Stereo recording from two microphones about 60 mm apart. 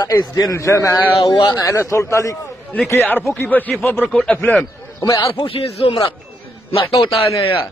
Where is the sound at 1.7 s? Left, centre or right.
Left.